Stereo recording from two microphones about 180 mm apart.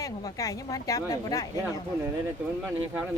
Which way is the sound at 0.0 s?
20° left (ahead or behind).